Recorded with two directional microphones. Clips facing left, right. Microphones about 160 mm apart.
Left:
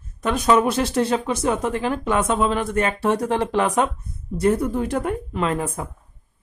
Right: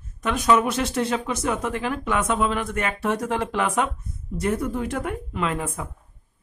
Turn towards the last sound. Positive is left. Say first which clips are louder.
# left 3 dB
turn(degrees=40)  # may be behind; listen again after turning